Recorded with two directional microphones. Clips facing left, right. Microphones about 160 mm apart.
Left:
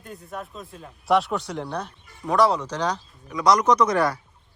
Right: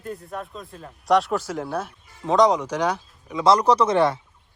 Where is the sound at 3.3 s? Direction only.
25° right (ahead or behind).